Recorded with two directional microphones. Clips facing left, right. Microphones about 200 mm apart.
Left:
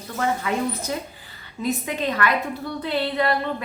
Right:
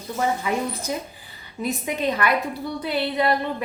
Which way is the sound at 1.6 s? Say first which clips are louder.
Even; 15° right (ahead or behind).